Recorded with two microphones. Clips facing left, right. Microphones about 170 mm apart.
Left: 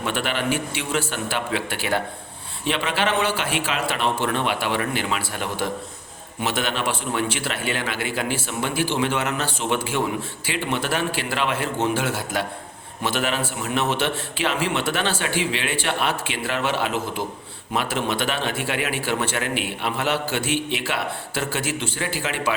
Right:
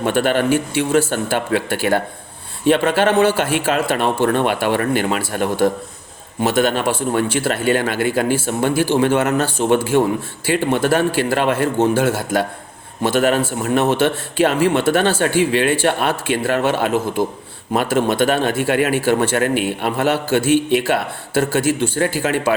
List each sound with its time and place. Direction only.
0.0 s speech: 45° right (ahead or behind)